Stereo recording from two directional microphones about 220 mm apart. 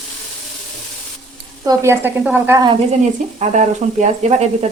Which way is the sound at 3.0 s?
35° right (ahead or behind).